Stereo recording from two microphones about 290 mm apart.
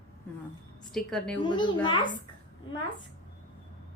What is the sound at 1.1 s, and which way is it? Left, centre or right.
Speech, centre.